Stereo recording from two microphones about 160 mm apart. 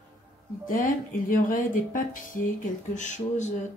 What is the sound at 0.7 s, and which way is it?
A woman's voice, 60° left (ahead or behind).